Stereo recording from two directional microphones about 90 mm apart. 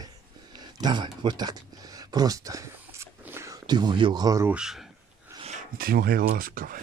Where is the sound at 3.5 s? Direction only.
50° right (ahead or behind).